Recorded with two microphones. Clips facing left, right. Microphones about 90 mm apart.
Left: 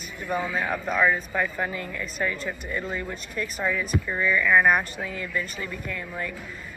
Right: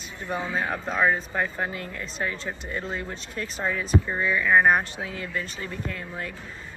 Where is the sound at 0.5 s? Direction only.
25° right (ahead or behind).